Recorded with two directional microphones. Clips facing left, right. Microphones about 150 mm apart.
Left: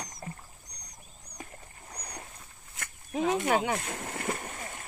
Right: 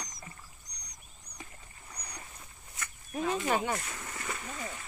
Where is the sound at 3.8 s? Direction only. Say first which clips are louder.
Left 6 dB; 60° left (ahead or behind).